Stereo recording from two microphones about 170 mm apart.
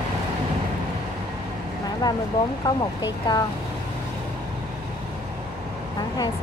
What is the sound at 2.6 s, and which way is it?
Speech, 25° left (ahead or behind).